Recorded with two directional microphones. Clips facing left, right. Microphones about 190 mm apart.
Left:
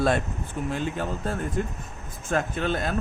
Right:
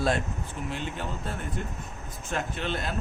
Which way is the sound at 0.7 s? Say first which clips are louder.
Left 6 dB; 45° left (ahead or behind).